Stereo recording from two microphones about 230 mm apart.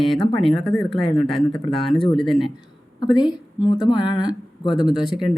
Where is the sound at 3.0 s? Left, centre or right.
Centre.